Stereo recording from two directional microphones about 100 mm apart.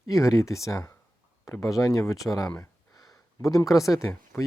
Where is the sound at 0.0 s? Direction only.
30° left (ahead or behind).